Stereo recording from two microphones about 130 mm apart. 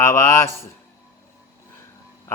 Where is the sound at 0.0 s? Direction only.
20° left (ahead or behind).